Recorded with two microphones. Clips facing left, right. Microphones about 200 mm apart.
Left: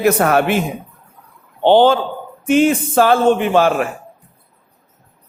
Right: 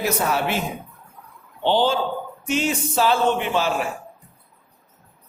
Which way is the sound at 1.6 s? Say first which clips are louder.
Left 8 dB; 60° left (ahead or behind).